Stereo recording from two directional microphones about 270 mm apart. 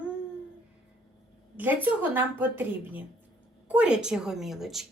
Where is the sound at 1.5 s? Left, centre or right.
Centre.